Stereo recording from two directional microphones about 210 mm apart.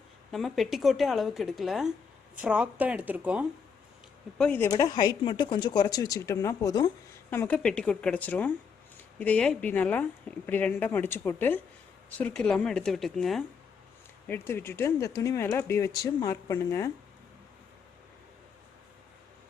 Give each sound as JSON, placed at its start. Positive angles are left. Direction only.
{"t": 0.3, "sound": "speech", "side_deg": 0}
{"t": 4.4, "sound": "speech", "side_deg": 10}